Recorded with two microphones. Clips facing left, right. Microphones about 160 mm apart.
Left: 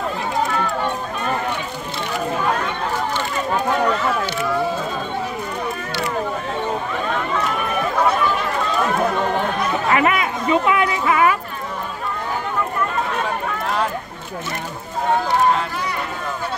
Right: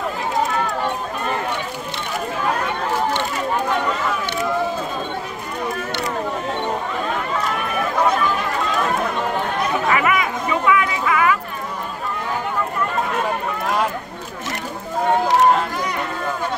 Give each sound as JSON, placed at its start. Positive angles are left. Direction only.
{"t": 9.8, "sound": "chatter", "side_deg": 30}